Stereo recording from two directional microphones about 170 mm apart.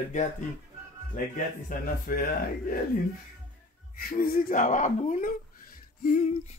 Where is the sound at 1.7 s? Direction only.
55° left (ahead or behind).